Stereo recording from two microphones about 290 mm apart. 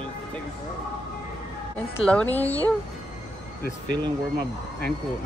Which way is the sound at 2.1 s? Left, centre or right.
Centre.